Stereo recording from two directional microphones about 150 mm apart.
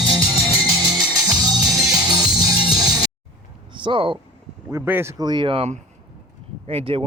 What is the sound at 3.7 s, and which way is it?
Speech, 35° right (ahead or behind).